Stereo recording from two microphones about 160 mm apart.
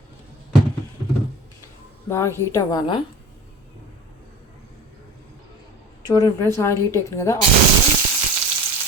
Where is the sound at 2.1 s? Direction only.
15° left (ahead or behind).